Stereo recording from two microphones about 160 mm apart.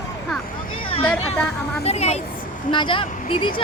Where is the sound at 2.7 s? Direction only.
30° left (ahead or behind).